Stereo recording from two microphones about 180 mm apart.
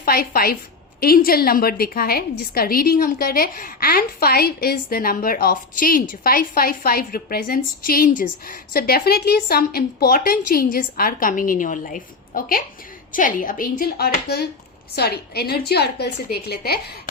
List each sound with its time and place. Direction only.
0.0 s a woman's voice: 55° left (ahead or behind)